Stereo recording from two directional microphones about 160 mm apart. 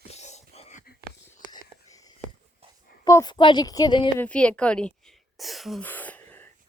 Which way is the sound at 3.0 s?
25° left (ahead or behind).